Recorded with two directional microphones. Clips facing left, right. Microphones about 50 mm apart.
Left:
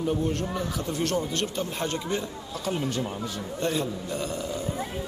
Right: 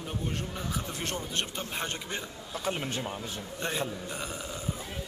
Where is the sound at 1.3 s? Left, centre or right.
Centre.